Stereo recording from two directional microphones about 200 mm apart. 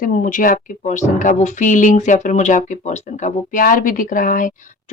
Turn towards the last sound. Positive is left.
turn(degrees=40)  # may be behind; listen again after turning